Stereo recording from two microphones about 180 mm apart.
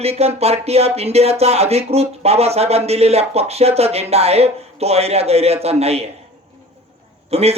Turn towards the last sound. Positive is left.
turn(degrees=-35)  # may be behind; listen again after turning